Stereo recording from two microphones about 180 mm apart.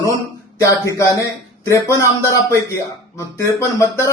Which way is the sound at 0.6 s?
15° left (ahead or behind).